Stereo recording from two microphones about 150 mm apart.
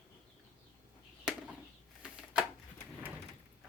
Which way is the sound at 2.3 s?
5° right (ahead or behind).